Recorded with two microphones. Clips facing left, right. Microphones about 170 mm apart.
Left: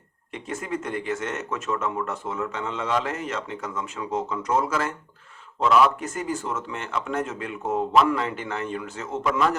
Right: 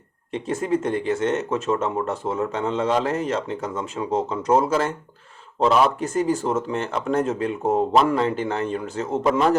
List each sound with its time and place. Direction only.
0.3 s speech: 30° right (ahead or behind)